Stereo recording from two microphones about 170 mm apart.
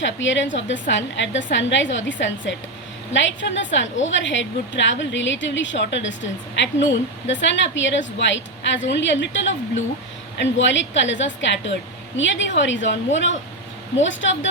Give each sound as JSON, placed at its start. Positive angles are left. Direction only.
{"t": 0.0, "sound": "a woman's voice", "side_deg": 90}